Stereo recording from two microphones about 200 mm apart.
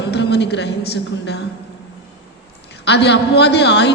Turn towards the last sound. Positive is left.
turn(degrees=60)  # may be behind; listen again after turning